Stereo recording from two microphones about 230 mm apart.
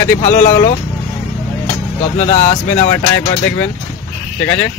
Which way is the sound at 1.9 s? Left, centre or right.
Left.